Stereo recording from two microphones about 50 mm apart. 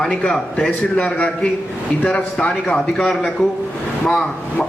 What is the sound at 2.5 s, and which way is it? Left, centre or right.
Speech, centre.